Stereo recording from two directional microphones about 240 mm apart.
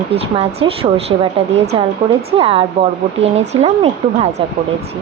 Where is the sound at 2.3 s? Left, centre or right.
Right.